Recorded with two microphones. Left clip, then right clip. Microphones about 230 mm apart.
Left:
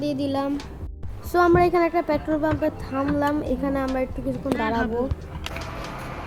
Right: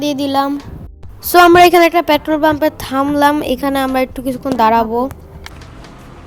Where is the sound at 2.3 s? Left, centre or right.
Right.